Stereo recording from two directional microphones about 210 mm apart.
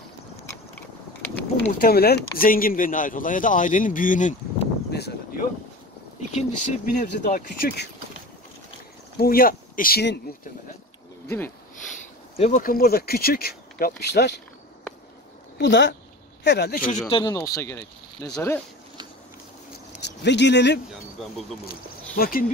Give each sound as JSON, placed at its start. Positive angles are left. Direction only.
{"t": 1.8, "sound": "speech", "side_deg": 45}
{"t": 4.9, "sound": "a sound", "side_deg": 50}
{"t": 6.3, "sound": "speech", "side_deg": 35}
{"t": 9.1, "sound": "speech", "side_deg": 45}
{"t": 11.2, "sound": "speech", "side_deg": 10}
{"t": 12.4, "sound": "speech", "side_deg": 30}
{"t": 12.6, "sound": "speech", "side_deg": 45}
{"t": 15.5, "sound": "speech", "side_deg": 55}
{"t": 17.1, "sound": "speech", "side_deg": 20}
{"t": 20.0, "sound": "speech", "side_deg": 55}
{"t": 21.2, "sound": "speech", "side_deg": 0}
{"t": 22.1, "sound": "speech", "side_deg": 45}